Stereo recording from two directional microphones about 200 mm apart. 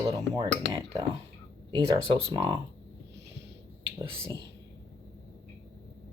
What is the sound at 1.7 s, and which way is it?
Speech, 25° right (ahead or behind).